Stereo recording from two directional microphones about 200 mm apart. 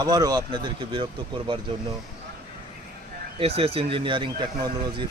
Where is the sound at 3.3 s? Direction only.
30° right (ahead or behind).